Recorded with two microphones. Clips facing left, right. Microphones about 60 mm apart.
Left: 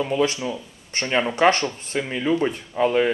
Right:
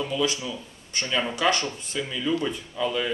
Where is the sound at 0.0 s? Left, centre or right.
Left.